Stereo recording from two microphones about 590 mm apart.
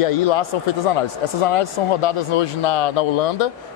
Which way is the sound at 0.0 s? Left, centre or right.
Left.